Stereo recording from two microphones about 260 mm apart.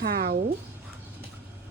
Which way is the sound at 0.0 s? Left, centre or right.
Right.